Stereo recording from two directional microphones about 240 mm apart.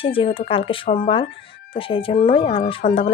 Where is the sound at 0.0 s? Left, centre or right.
Left.